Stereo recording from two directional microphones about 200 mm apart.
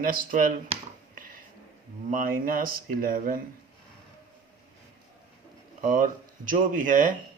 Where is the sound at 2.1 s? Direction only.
45° right (ahead or behind).